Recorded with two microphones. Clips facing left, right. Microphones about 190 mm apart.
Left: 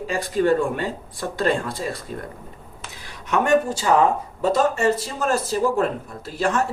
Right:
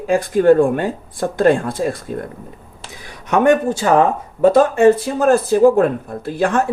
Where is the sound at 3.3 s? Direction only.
55° right (ahead or behind).